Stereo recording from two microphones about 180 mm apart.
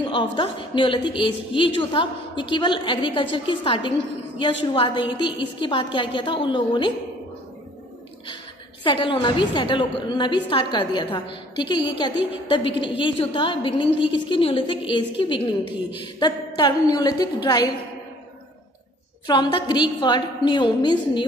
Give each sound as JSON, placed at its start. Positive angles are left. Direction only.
{"t": 0.0, "sound": "a woman's voice", "side_deg": 25}
{"t": 8.8, "sound": "a woman's voice", "side_deg": 30}
{"t": 19.2, "sound": "a woman's voice", "side_deg": 25}